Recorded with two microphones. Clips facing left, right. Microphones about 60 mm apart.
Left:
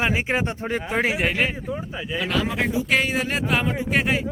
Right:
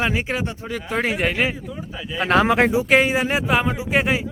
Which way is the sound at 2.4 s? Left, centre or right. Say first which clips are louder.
Right 7 dB; right.